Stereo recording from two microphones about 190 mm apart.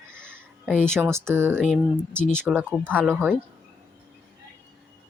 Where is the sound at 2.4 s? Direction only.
10° right (ahead or behind).